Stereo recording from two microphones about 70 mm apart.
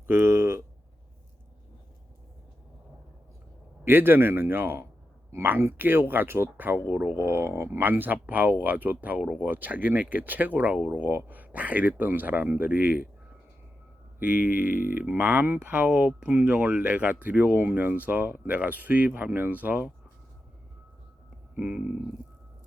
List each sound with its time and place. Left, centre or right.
0.1 s a sound: right
3.8 s a man's voice: right
7.2 s speech: right
14.2 s speech: right
21.5 s speech: right